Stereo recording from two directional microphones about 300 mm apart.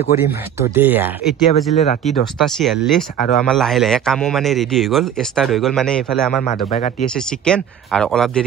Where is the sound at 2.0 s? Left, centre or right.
Centre.